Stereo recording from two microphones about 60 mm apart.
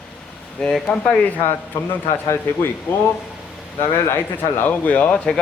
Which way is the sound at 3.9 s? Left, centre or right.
Left.